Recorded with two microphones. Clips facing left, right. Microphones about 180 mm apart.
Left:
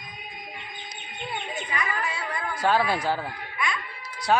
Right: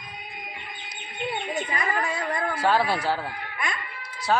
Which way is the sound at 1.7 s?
40° right (ahead or behind).